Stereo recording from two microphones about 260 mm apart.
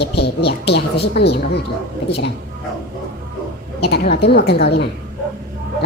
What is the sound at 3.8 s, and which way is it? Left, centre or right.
A woman's voice, left.